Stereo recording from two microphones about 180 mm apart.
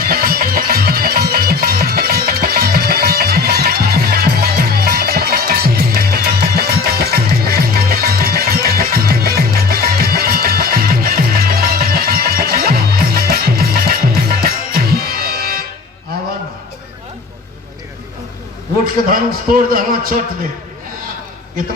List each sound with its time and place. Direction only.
0.0 s music: 55° right (ahead or behind)
19.0 s a man's voice: 50° right (ahead or behind)